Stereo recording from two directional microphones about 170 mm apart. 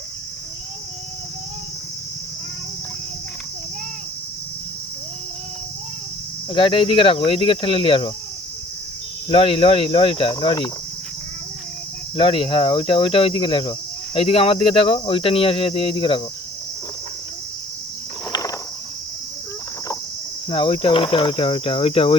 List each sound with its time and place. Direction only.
6.5 s speech: 30° left (ahead or behind)
9.3 s speech: 30° left (ahead or behind)
12.1 s speech: 35° left (ahead or behind)
18.3 s a sound: 25° left (ahead or behind)
20.5 s speech: 30° left (ahead or behind)